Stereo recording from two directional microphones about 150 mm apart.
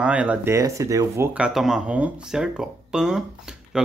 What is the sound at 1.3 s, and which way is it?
Speech, 5° right (ahead or behind).